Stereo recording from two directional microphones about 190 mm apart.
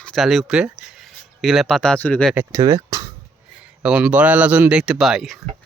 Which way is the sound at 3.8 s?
5° right (ahead or behind).